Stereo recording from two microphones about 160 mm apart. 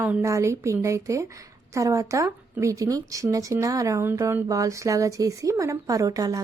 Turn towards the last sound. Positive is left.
turn(degrees=-25)  # may be behind; listen again after turning